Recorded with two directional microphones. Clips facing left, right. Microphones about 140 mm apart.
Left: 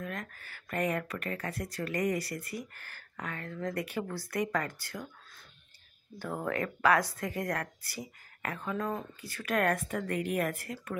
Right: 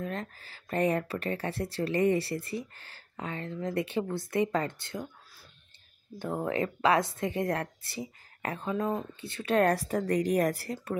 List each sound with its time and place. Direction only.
0.0 s speech: 30° right (ahead or behind)
6.1 s speech: 20° right (ahead or behind)